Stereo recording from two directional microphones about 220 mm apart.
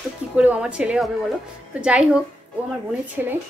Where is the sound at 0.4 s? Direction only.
5° right (ahead or behind).